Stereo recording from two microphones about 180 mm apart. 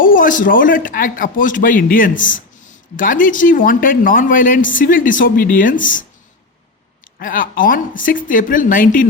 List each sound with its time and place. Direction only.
0.0 s speech: 50° left (ahead or behind)
7.2 s speech: 50° left (ahead or behind)